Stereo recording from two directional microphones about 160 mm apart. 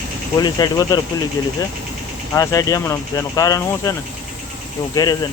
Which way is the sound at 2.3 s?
20° left (ahead or behind).